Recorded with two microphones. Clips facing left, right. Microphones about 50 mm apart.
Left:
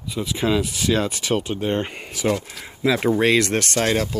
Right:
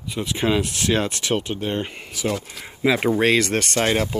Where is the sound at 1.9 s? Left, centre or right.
Left.